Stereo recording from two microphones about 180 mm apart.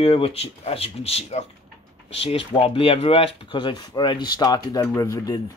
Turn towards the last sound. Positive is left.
turn(degrees=20)  # may be behind; listen again after turning